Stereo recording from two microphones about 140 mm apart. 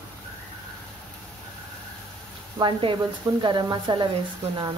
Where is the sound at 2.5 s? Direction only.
35° right (ahead or behind).